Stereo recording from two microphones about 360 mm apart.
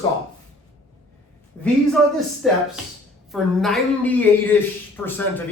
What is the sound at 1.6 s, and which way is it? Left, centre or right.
A woman's voice, centre.